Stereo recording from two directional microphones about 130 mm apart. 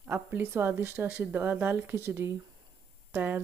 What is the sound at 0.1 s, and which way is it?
Speech, 15° right (ahead or behind).